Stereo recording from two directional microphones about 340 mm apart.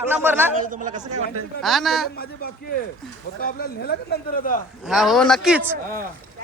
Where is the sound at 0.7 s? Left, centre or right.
Right.